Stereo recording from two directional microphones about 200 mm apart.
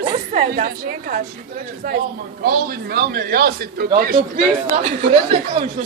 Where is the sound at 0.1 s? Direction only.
30° right (ahead or behind).